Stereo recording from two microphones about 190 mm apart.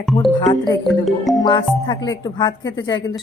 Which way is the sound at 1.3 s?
20° left (ahead or behind).